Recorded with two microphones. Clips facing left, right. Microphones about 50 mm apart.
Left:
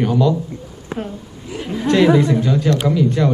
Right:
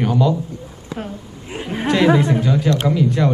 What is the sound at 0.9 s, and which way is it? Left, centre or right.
Speech, left.